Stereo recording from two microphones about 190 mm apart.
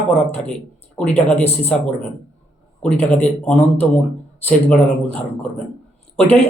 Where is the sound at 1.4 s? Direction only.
35° left (ahead or behind).